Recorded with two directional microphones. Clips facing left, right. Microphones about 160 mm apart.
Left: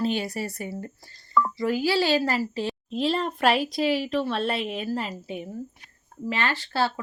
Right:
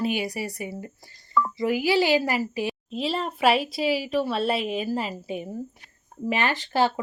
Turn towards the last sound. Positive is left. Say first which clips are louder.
# right 3 dB
turn(degrees=-15)  # may be behind; listen again after turning